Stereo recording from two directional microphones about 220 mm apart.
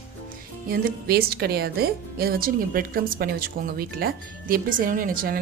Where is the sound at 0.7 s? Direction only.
45° right (ahead or behind).